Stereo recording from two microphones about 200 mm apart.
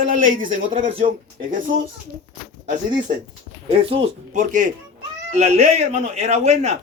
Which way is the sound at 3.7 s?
30° right (ahead or behind).